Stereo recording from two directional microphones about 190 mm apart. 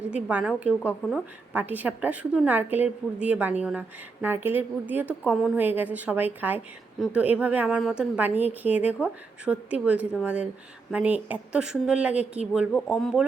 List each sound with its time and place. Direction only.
0.1 s a woman's voice: 5° right (ahead or behind)